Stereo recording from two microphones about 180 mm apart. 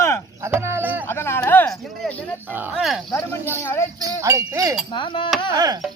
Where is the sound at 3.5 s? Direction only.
15° left (ahead or behind).